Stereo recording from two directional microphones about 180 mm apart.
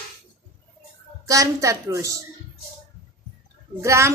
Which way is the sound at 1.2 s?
20° right (ahead or behind).